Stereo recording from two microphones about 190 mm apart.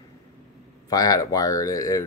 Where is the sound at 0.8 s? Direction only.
20° left (ahead or behind).